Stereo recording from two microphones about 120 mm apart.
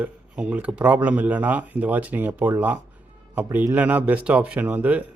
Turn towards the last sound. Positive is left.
turn(degrees=-15)  # may be behind; listen again after turning